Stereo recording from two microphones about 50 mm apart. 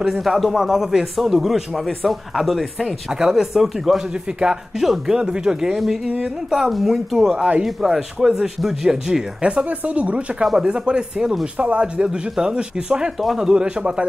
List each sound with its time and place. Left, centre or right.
0.0 s speech: centre
3.1 s speech: centre
4.1 s speech: centre
4.7 s speech: centre
6.5 s speech: centre
9.4 s speech: right
10.4 s speech: centre
13.2 s speech: centre
13.5 s speech: centre